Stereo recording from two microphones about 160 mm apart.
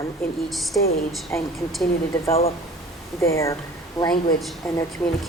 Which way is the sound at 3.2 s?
20° left (ahead or behind).